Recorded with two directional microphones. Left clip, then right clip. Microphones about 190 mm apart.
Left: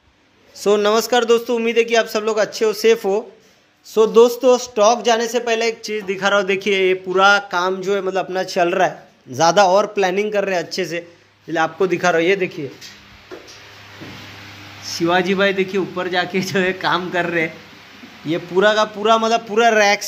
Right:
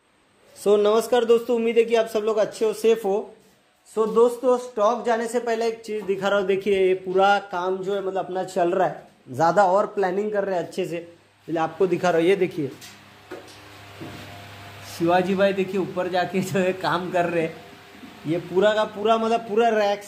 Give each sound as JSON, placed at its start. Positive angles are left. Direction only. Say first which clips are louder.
{"t": 0.7, "sound": "a man's voice", "louder": "left 3 dB", "side_deg": 5}
{"t": 3.9, "sound": "speech", "louder": "left 7 dB", "side_deg": 30}
{"t": 10.0, "sound": "speech", "louder": "left 5 dB", "side_deg": 20}
{"t": 10.5, "sound": "a man's voice", "louder": "left 5 dB", "side_deg": 0}
{"t": 15.0, "sound": "a man's voice", "louder": "left 3 dB", "side_deg": -5}
{"t": 18.6, "sound": "a man's voice", "louder": "left 5 dB", "side_deg": 10}